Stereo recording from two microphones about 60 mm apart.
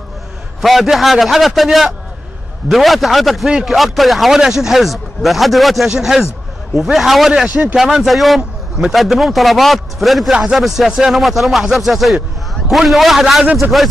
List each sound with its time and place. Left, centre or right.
0.6 s speech: centre
7.4 s speech: right
7.7 s speech: centre